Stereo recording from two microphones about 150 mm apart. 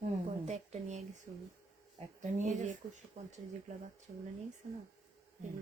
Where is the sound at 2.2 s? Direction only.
55° right (ahead or behind).